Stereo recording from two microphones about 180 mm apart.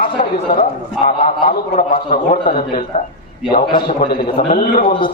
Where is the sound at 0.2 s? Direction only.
50° left (ahead or behind).